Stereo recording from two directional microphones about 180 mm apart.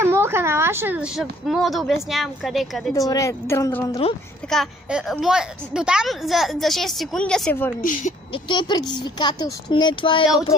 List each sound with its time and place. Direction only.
0.0 s a sound: 15° right (ahead or behind)
1.5 s a woman's voice: centre (ahead or behind)
2.9 s a woman's voice: 20° left (ahead or behind)
4.5 s a woman's voice: centre (ahead or behind)
8.3 s speech: 25° left (ahead or behind)